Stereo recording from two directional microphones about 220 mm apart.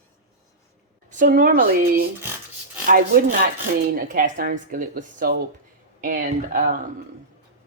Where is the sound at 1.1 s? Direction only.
35° right (ahead or behind).